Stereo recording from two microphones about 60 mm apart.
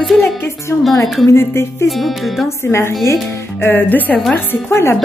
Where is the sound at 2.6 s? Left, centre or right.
Left.